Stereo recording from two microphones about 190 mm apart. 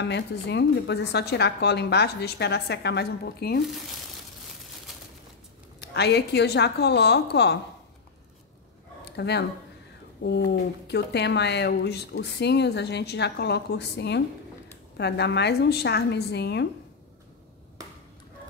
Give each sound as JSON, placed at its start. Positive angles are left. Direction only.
{"t": 0.0, "sound": "speech", "side_deg": 65}
{"t": 5.8, "sound": "speech", "side_deg": 60}
{"t": 9.1, "sound": "speech", "side_deg": 65}